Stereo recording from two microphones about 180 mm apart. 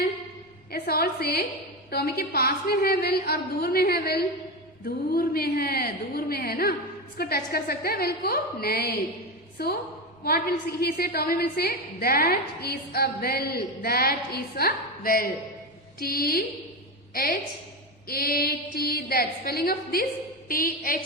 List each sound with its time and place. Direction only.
0.7 s a woman's voice: 60° left (ahead or behind)
18.1 s a woman's voice: 55° left (ahead or behind)